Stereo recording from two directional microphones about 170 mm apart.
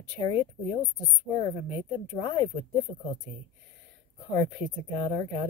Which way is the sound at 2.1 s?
20° left (ahead or behind).